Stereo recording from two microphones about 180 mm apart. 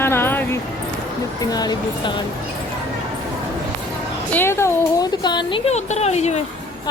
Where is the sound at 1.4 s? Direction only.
20° left (ahead or behind).